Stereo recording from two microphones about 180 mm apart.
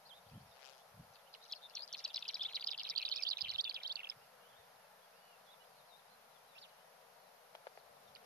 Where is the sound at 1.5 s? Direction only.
5° left (ahead or behind).